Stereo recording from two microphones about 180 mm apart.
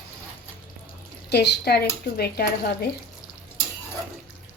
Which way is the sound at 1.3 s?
65° left (ahead or behind).